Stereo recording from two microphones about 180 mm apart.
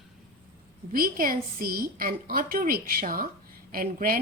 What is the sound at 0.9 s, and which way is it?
A woman's voice, 50° right (ahead or behind).